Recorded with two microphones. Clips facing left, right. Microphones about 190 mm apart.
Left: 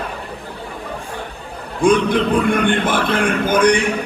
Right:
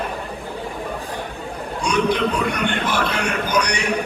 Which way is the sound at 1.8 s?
55° left (ahead or behind).